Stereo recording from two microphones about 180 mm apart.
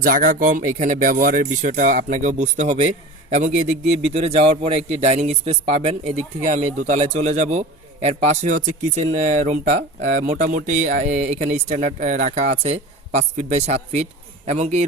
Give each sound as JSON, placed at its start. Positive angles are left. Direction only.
{"t": 0.0, "sound": "speech", "side_deg": -50}